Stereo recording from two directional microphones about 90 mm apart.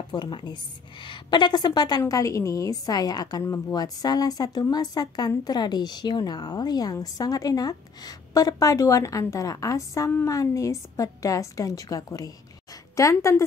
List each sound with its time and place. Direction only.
0.1 s a woman's voice: 60° left (ahead or behind); by 13.5 s 30° left (ahead or behind)